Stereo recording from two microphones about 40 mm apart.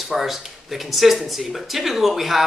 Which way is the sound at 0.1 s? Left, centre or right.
Centre.